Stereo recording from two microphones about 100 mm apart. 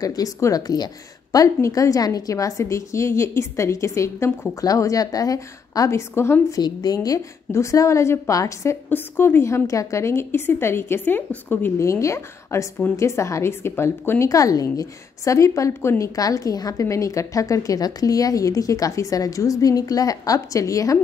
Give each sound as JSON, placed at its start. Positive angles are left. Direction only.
{"t": 0.0, "sound": "a woman's voice", "side_deg": 35}
{"t": 6.6, "sound": "a woman's voice", "side_deg": 40}
{"t": 8.9, "sound": "a woman's voice", "side_deg": 20}
{"t": 11.8, "sound": "a woman's voice", "side_deg": 30}